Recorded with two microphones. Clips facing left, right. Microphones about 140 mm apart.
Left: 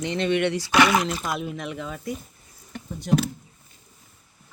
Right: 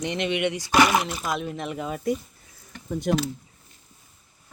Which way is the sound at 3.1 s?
65° right (ahead or behind).